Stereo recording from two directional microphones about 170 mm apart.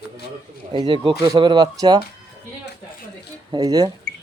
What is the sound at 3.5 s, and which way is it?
Speech, 20° right (ahead or behind).